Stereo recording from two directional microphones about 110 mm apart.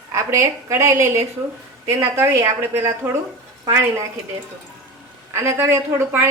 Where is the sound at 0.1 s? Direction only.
25° right (ahead or behind).